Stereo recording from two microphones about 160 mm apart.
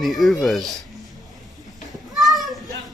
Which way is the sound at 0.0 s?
Centre (ahead or behind).